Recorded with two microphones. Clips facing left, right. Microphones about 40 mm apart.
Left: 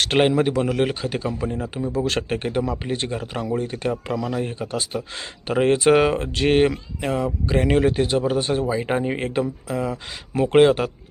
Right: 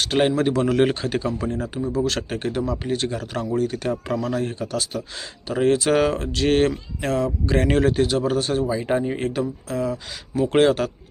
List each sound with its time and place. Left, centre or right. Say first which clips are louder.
0.2 s speech: left 1 dB; centre
0.4 s speech: right 2 dB; centre; by 9.9 s left
9.9 s speech: even; left
10.5 s speech: left 3 dB; centre